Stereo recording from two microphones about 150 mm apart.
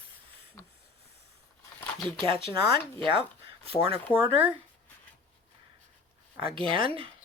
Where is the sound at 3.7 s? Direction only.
40° right (ahead or behind).